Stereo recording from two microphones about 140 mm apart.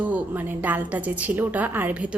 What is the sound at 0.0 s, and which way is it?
Speech, 10° right (ahead or behind).